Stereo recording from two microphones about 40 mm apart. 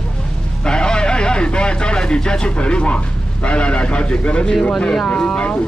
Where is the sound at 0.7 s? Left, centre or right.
Left.